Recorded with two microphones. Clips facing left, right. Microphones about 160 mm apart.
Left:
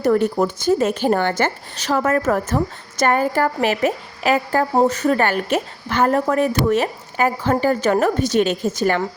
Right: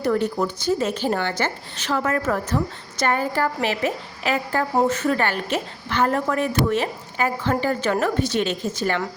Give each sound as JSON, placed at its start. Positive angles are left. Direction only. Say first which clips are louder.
{"t": 0.0, "sound": "a woman's voice", "louder": "left 5 dB", "side_deg": 45}